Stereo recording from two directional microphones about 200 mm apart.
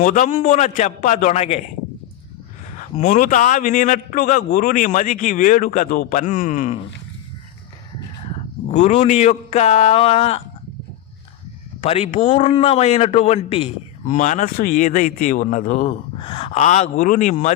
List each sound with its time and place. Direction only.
0.0 s a man's voice: 40° left (ahead or behind)
2.7 s a man's voice: 40° left (ahead or behind)
8.3 s speech: 35° left (ahead or behind)
11.8 s a man's voice: 35° left (ahead or behind)
16.1 s a man's voice: 25° left (ahead or behind)